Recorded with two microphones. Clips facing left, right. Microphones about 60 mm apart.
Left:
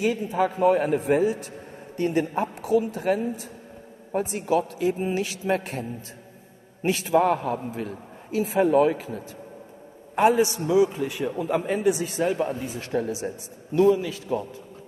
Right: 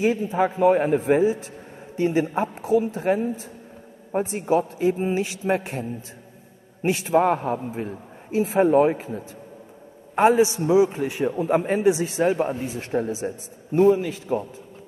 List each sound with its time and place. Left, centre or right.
0.0 s a woman's voice: right
13.7 s speech: right